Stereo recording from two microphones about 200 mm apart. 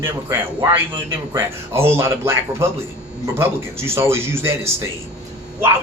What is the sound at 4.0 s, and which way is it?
Speech, 10° right (ahead or behind).